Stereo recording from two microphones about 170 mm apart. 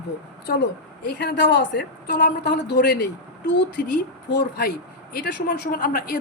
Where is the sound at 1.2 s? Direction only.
75° left (ahead or behind).